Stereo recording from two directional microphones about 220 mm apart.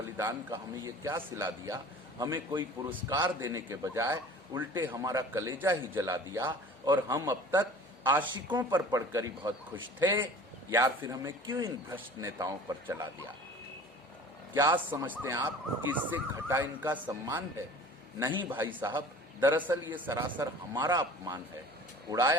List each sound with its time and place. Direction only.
0.2 s a man's voice: 20° right (ahead or behind)
14.5 s a man's voice: 15° right (ahead or behind)
18.5 s a man's voice: 10° right (ahead or behind)
18.8 s a man's voice: 20° right (ahead or behind)
19.4 s a man's voice: 10° right (ahead or behind)